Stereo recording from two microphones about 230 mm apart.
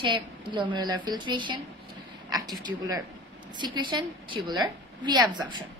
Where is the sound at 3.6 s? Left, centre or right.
Centre.